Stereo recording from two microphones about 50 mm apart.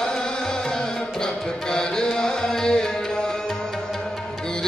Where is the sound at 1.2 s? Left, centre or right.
Centre.